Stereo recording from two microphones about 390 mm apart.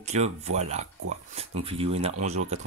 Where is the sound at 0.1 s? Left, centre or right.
Centre.